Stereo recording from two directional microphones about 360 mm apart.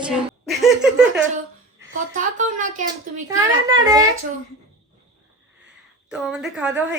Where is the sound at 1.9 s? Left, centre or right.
Right.